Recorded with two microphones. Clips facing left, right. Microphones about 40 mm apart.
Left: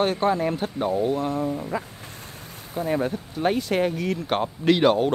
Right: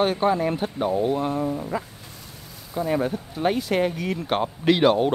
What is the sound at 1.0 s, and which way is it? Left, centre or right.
Speech, right.